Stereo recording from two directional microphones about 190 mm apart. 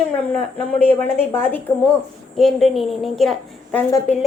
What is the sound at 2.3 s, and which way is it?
A woman's voice, centre (ahead or behind).